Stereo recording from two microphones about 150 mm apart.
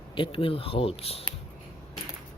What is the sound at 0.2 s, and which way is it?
Speech, 35° left (ahead or behind).